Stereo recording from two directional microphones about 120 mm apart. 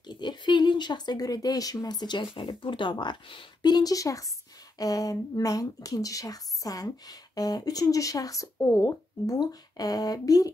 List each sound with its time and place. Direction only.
0.0 s speech: 40° left (ahead or behind)